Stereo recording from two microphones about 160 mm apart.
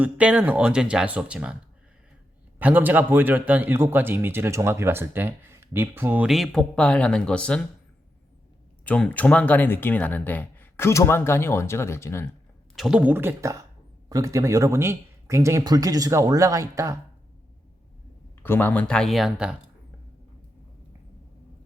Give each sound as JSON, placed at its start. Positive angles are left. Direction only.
{"t": 0.0, "sound": "a man's voice", "side_deg": -5}
{"t": 2.6, "sound": "a man's voice", "side_deg": -10}
{"t": 8.8, "sound": "speech", "side_deg": 10}
{"t": 12.7, "sound": "speech", "side_deg": 0}
{"t": 13.0, "sound": "a man's voice", "side_deg": -10}
{"t": 18.4, "sound": "speech", "side_deg": 15}